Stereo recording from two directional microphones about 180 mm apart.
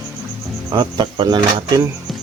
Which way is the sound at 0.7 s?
25° right (ahead or behind).